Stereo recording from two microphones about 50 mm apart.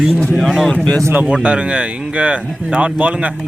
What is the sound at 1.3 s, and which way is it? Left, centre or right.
A man's voice, right.